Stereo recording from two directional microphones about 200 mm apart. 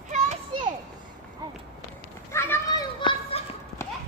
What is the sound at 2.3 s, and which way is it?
Children playing, 15° left (ahead or behind).